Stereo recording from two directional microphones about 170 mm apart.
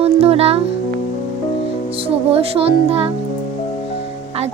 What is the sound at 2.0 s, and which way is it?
Speech, 35° right (ahead or behind).